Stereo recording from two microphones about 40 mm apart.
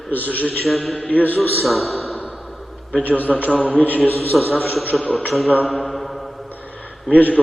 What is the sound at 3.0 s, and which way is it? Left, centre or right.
Speech, left.